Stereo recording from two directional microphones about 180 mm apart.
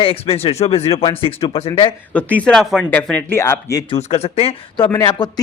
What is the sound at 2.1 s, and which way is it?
A man's voice, 5° left (ahead or behind).